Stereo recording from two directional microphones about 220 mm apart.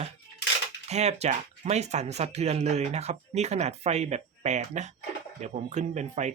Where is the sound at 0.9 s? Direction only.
30° right (ahead or behind).